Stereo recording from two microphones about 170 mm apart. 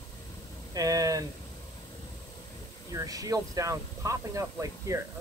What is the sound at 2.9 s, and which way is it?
Speech, 20° right (ahead or behind).